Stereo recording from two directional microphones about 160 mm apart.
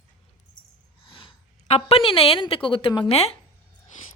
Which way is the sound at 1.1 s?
35° left (ahead or behind).